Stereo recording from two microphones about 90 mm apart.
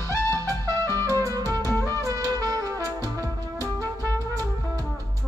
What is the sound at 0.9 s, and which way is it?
Music, 40° right (ahead or behind).